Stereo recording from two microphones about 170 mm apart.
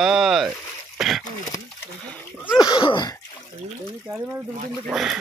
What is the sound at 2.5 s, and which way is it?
Sneeze, 25° left (ahead or behind).